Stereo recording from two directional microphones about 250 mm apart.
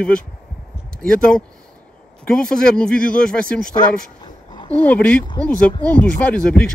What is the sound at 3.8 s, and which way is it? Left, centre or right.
Dog, centre.